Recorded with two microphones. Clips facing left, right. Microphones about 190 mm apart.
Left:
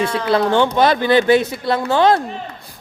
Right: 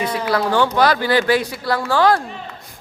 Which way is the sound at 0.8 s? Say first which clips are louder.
Left 2 dB; 20° left (ahead or behind).